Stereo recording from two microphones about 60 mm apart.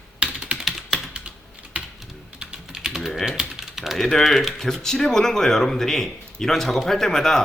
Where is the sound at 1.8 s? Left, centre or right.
Right.